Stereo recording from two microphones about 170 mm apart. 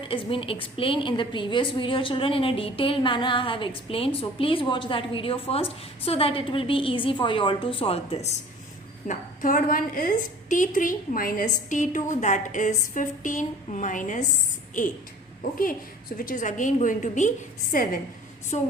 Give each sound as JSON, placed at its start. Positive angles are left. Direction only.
{"t": 0.0, "sound": "a woman's voice", "side_deg": 30}
{"t": 9.0, "sound": "a woman's voice", "side_deg": 50}
{"t": 15.5, "sound": "a woman's voice", "side_deg": 55}